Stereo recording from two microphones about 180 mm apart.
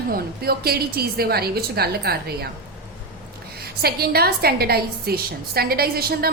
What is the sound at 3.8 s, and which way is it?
A woman's voice, 60° right (ahead or behind).